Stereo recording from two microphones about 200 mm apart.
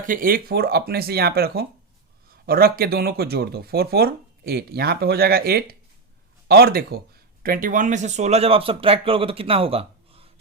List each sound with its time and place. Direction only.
0.0 s speech: 45° right (ahead or behind); by 10.2 s 30° right (ahead or behind)